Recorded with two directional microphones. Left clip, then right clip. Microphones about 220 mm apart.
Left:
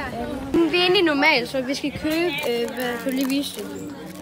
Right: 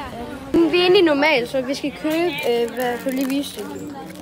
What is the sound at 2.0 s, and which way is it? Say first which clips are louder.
Speech: right 2 dB; 10° left (ahead or behind).